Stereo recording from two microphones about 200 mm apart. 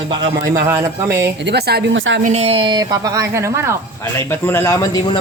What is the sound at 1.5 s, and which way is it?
Speech, 55° right (ahead or behind).